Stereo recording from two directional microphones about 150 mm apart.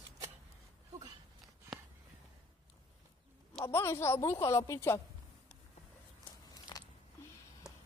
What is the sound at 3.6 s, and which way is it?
Speech, 20° left (ahead or behind).